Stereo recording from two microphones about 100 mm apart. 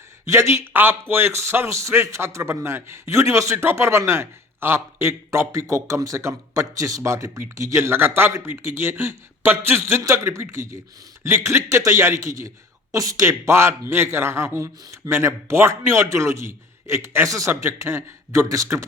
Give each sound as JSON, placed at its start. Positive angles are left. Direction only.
{"t": 0.3, "sound": "a man's voice", "side_deg": -30}